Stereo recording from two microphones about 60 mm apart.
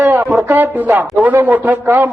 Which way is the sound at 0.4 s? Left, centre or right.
Right.